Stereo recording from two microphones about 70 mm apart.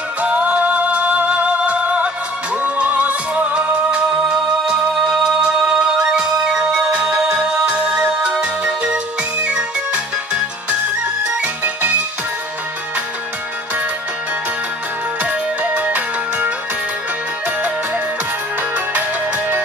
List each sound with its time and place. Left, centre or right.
0.2 s music: right
15.2 s music: centre
17.6 s music: right